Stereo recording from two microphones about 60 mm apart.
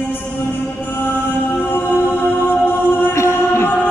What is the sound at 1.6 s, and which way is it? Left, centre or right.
Music, left.